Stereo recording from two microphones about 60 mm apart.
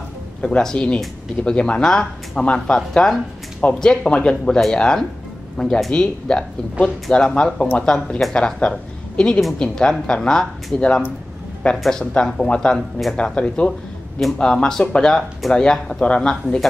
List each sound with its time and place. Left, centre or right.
0.4 s a woman's voice: centre